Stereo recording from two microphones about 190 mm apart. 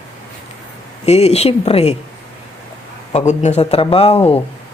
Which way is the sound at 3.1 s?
35° left (ahead or behind).